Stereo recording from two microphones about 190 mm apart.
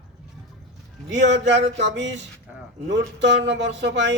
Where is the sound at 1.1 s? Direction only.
70° right (ahead or behind).